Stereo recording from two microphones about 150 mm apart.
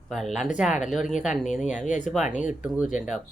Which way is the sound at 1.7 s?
55° left (ahead or behind).